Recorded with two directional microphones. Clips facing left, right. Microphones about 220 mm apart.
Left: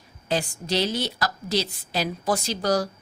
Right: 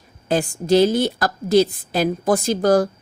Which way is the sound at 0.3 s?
50° right (ahead or behind).